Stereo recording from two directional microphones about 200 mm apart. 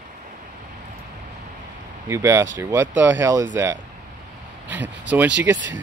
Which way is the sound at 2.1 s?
15° right (ahead or behind).